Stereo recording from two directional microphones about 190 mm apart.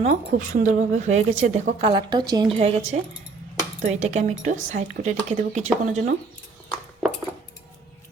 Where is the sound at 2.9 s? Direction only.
40° right (ahead or behind).